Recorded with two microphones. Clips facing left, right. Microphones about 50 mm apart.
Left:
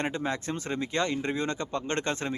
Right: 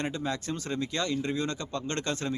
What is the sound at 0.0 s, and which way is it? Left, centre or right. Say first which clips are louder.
Speech: left 2 dB; left.